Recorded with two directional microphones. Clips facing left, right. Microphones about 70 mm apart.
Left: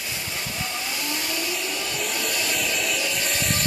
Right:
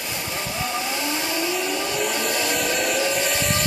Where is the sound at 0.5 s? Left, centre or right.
Right.